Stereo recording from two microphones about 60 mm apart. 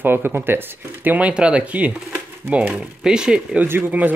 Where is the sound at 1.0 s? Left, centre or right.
Right.